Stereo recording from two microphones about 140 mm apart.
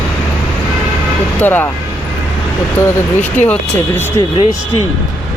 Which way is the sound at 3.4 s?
10° left (ahead or behind).